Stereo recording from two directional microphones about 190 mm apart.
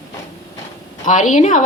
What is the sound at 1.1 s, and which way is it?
Speech, 40° left (ahead or behind).